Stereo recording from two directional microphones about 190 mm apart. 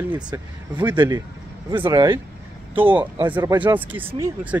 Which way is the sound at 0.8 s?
20° right (ahead or behind).